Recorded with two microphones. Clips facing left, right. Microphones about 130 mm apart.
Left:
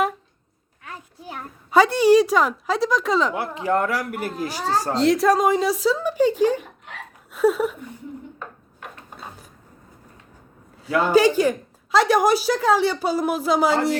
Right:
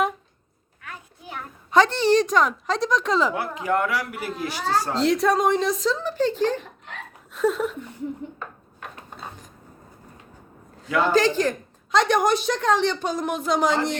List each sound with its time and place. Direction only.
0.8 s a sound: 30° left (ahead or behind)
1.7 s a woman's voice: 10° left (ahead or behind)
3.3 s speech: 25° left (ahead or behind)
4.9 s speech: centre (ahead or behind)
7.3 s a sound: 10° left (ahead or behind)
8.4 s wood: 5° left (ahead or behind)
10.8 s a woman's voice: 10° left (ahead or behind)